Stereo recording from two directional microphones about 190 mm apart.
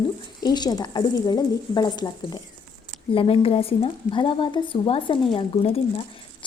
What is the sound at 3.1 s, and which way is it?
A woman's voice, 30° left (ahead or behind).